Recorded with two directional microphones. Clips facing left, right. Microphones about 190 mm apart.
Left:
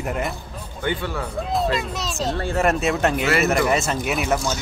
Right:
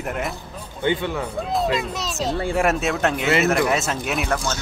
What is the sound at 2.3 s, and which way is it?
Speech, 10° right (ahead or behind).